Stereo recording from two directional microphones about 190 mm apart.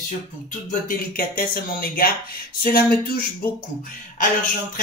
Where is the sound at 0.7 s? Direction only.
50° left (ahead or behind).